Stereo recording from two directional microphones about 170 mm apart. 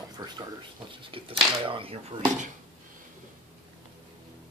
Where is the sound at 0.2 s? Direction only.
25° right (ahead or behind).